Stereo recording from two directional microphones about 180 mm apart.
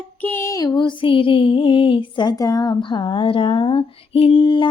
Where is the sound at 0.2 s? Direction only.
10° left (ahead or behind).